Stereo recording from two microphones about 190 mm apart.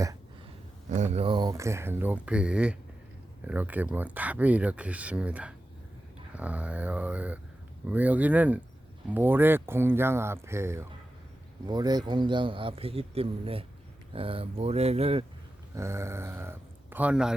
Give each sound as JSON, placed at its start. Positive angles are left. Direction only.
{"t": 0.9, "sound": "a man's voice", "side_deg": -40}
{"t": 15.7, "sound": "speech", "side_deg": -15}